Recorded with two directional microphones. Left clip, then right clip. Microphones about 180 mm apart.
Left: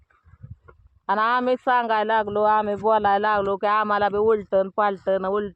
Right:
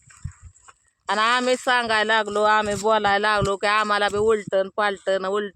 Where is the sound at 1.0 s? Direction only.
10° right (ahead or behind).